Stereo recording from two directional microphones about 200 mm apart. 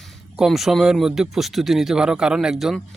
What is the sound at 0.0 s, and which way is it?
Speech, centre (ahead or behind).